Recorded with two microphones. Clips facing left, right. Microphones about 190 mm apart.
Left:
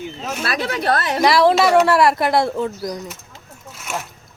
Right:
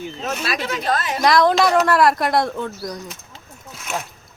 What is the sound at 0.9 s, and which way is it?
Speech, 65° left (ahead or behind).